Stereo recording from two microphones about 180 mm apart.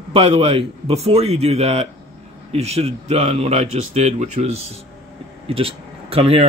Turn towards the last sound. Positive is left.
turn(degrees=-35)  # may be behind; listen again after turning